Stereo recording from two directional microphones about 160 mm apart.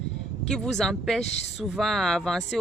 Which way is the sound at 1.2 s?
45° left (ahead or behind).